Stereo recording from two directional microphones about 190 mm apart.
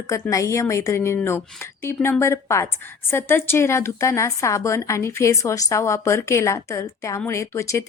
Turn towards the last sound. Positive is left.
turn(degrees=15)  # may be behind; listen again after turning